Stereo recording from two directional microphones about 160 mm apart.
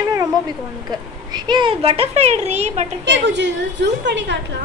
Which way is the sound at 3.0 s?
90° right.